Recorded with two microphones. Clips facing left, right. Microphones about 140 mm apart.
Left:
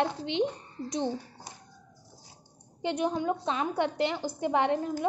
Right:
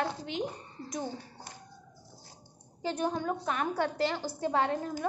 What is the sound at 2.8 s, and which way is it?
A woman's voice, 20° left (ahead or behind).